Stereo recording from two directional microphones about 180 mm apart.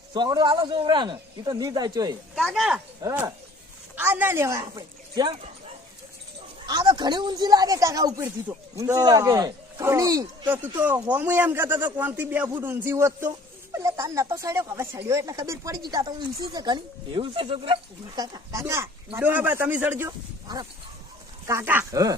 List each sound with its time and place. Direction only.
0.1 s speech: 25° right (ahead or behind)
2.3 s speech: centre (ahead or behind)
3.0 s speech: 20° right (ahead or behind)
6.7 s speech: 25° right (ahead or behind)
18.6 s speech: 15° right (ahead or behind)
21.4 s speech: 15° right (ahead or behind)